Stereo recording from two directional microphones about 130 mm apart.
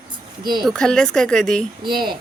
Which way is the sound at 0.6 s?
5° left (ahead or behind).